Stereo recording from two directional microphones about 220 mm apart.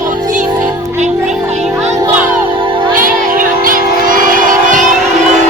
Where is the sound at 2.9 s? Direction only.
40° right (ahead or behind).